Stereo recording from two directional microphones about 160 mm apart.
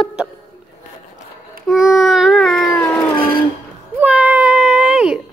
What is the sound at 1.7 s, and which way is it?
Child singing, 5° right (ahead or behind).